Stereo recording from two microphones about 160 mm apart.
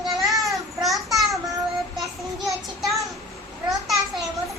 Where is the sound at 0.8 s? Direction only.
Centre (ahead or behind).